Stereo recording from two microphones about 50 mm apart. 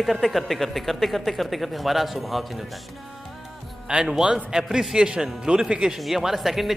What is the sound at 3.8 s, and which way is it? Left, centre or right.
A man's voice, centre.